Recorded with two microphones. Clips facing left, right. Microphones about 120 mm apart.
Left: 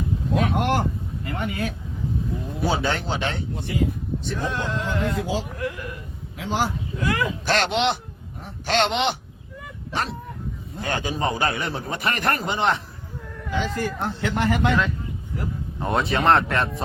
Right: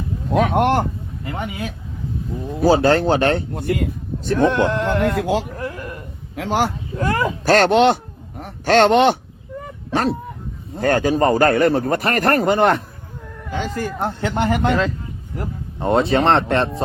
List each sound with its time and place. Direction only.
0.3 s speech: 60° right (ahead or behind)
2.6 s a man's voice: 40° right (ahead or behind); by 5.5 s 65° right (ahead or behind)
5.5 s a sound: 35° right (ahead or behind)
6.3 s a man's voice: 65° right (ahead or behind)
6.9 s a man's voice: 45° right (ahead or behind)
8.4 s a sound: 55° right (ahead or behind)
10.8 s a man's voice: 45° right (ahead or behind); by 16.8 s 30° right (ahead or behind)